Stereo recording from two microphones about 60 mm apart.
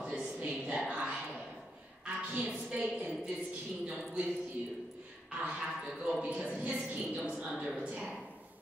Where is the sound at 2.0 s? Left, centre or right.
Centre.